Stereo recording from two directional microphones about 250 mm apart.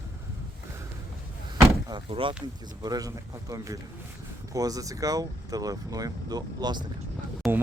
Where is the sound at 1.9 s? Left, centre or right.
Right.